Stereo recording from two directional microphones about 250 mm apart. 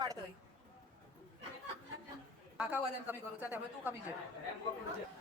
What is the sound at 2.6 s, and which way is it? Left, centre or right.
A woman's voice, centre.